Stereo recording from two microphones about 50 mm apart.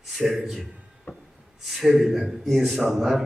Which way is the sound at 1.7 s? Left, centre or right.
Centre.